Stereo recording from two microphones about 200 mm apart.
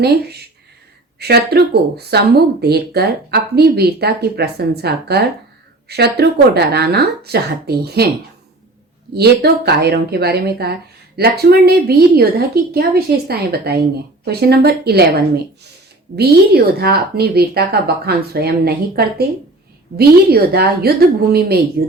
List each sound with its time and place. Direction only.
0.0 s speech: 55° right (ahead or behind)
9.1 s speech: 55° right (ahead or behind)